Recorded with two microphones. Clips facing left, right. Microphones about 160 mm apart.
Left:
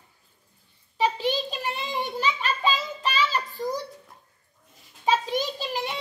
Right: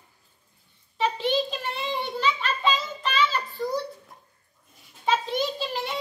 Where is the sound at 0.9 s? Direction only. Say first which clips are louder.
Even; 10° left (ahead or behind).